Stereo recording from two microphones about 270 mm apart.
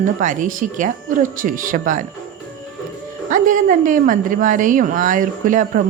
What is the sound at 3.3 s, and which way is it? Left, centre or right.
A woman's voice, right.